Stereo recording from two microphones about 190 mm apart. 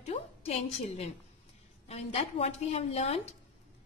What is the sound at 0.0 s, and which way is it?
A woman's voice, 35° left (ahead or behind).